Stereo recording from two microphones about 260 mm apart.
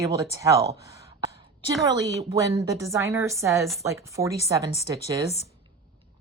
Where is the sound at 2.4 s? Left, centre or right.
Centre.